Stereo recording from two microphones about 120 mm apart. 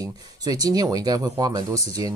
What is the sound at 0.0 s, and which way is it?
Speech, 30° right (ahead or behind).